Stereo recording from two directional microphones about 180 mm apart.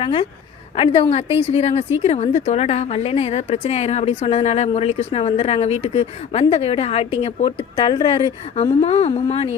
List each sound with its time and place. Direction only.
0.0 s a woman's voice: 30° left (ahead or behind)